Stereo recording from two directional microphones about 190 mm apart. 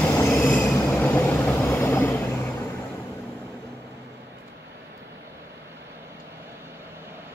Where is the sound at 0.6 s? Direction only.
5° left (ahead or behind).